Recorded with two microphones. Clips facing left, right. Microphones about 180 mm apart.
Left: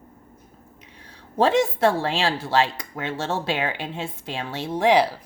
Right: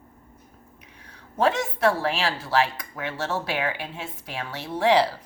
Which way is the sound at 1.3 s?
25° left (ahead or behind).